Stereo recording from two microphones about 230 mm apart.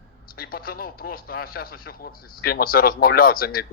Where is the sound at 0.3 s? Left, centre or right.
Left.